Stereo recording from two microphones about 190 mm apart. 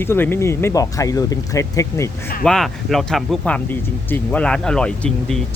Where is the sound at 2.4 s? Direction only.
Centre (ahead or behind).